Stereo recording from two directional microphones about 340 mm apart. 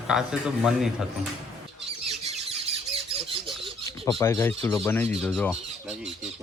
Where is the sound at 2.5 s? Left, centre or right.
Centre.